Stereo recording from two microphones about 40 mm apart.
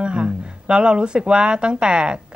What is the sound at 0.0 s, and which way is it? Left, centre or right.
A woman's voice, right.